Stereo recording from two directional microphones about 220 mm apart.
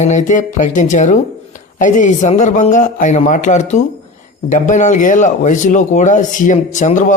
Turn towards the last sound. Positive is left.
turn(degrees=35)  # may be behind; listen again after turning